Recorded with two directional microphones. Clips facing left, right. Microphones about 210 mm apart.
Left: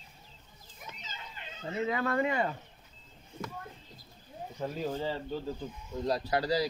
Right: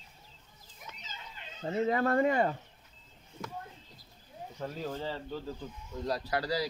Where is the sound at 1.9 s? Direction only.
40° right (ahead or behind).